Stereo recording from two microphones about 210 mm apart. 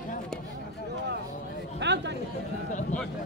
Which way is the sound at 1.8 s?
55° right (ahead or behind).